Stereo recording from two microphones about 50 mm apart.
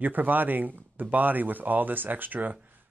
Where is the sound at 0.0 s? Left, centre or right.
Right.